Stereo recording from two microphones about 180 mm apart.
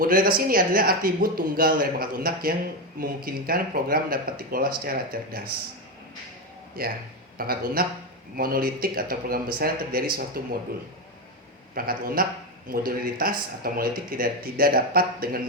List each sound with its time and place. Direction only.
0.0 s speech: 50° right (ahead or behind)
6.8 s speech: 55° right (ahead or behind)
11.7 s speech: 55° right (ahead or behind)